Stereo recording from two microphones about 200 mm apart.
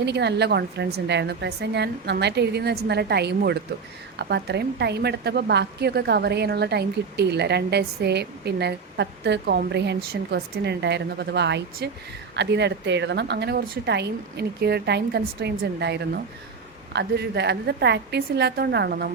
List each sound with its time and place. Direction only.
0.0 s a woman's voice: 60° right (ahead or behind)